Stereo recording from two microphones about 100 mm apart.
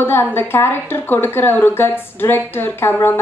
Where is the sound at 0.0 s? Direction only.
20° left (ahead or behind).